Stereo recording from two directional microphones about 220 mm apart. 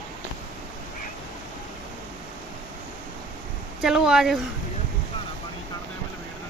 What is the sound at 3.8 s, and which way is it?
Speech, centre (ahead or behind).